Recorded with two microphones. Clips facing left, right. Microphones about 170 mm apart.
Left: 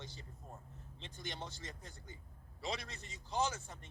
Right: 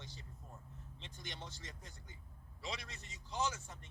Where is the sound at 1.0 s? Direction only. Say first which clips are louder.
Left 5 dB; 35° left (ahead or behind).